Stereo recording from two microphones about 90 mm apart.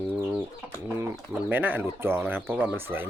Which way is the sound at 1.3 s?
20° right (ahead or behind).